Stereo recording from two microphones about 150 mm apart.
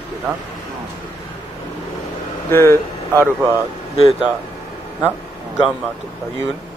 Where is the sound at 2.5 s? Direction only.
15° left (ahead or behind).